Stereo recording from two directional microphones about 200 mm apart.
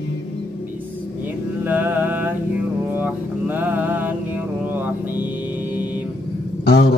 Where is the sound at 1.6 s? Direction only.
10° right (ahead or behind).